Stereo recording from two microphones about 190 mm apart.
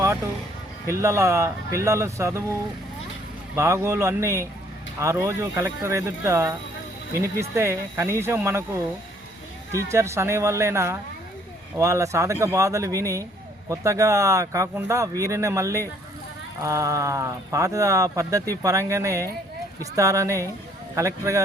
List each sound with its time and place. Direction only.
0.9 s speech: 15° right (ahead or behind)
3.5 s speech: 15° right (ahead or behind)
9.7 s speech: 15° right (ahead or behind)